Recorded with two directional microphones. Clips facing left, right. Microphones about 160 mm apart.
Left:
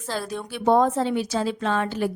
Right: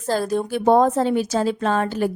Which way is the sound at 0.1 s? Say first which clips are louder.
Right 9 dB; 40° right (ahead or behind).